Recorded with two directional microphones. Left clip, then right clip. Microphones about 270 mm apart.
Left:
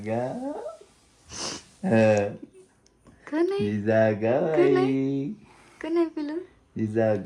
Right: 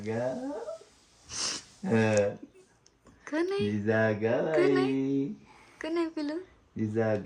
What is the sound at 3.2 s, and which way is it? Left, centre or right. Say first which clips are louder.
A child's voice: left 4 dB; centre.